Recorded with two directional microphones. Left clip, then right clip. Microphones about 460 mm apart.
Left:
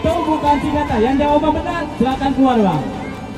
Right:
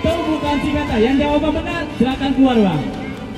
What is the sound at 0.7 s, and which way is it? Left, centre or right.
A man's voice, centre.